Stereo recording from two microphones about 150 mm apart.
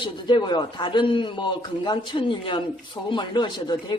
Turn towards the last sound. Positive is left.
turn(degrees=30)  # may be behind; listen again after turning